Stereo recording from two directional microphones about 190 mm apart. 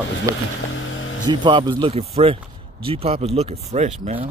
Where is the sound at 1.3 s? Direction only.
25° right (ahead or behind).